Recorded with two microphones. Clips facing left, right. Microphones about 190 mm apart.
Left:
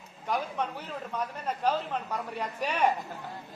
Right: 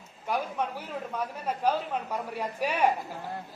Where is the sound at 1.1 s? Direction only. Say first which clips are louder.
Even; 10° right (ahead or behind).